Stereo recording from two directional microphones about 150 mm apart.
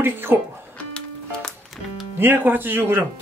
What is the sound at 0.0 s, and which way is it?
Speech, 15° right (ahead or behind).